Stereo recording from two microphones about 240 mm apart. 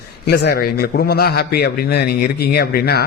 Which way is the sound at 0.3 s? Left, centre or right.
Left.